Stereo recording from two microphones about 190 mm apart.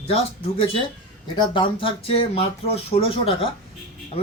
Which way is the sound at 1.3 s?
25° left (ahead or behind).